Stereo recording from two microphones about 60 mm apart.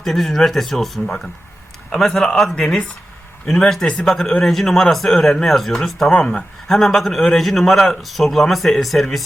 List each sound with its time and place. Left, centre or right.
0.0 s speech: centre
1.0 s speech: centre
2.6 s speech: centre
3.4 s speech: centre